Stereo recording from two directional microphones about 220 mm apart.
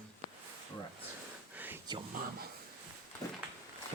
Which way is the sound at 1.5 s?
10° right (ahead or behind).